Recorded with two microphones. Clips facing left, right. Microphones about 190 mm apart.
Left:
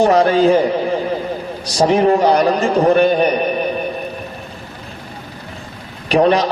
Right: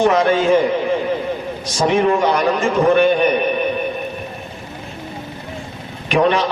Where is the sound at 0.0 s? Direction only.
35° left (ahead or behind).